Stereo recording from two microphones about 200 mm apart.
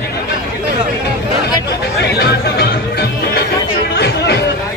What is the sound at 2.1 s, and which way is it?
Music, 55° left (ahead or behind).